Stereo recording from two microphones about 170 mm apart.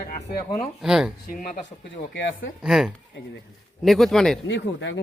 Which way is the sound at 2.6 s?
5° right (ahead or behind).